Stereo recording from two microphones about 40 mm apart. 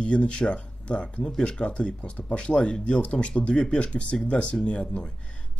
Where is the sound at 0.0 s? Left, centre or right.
Left.